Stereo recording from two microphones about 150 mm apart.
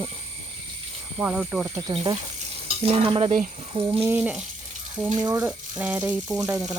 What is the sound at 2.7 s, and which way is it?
Stir, 40° right (ahead or behind).